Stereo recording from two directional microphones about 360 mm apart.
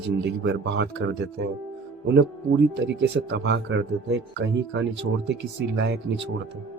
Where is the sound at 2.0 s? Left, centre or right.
Right.